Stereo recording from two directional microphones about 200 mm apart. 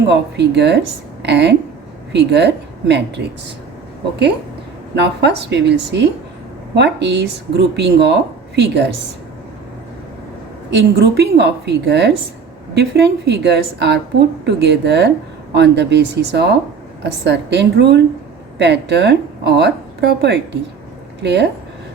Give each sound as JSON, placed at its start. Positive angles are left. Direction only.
{"t": 0.1, "sound": "a woman's voice", "side_deg": -60}
{"t": 4.9, "sound": "a woman's voice", "side_deg": -60}
{"t": 10.7, "sound": "a woman's voice", "side_deg": -55}